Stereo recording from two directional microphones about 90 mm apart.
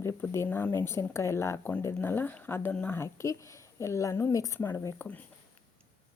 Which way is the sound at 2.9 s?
30° left (ahead or behind).